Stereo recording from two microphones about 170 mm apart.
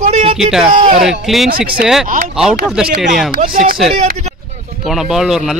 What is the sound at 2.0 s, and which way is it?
Speech, 50° right (ahead or behind).